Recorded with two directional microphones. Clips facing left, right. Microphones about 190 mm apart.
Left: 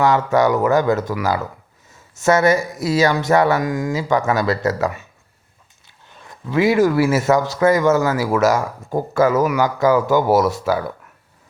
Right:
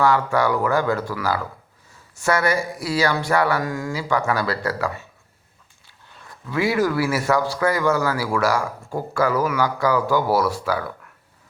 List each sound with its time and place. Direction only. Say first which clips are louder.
0.0 s speech: left 3 dB; 20° left (ahead or behind)
6.2 s speech: left 6 dB; 20° left (ahead or behind)